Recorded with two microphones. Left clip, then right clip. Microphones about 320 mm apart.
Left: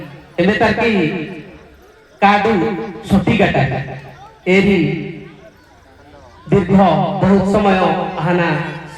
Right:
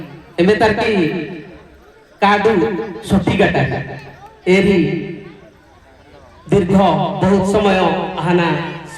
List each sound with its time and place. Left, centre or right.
0.3 s a man's voice: left
2.1 s a man's voice: left
6.5 s a man's voice: left